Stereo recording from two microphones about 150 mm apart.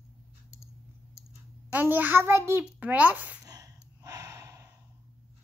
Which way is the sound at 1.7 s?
10° right (ahead or behind).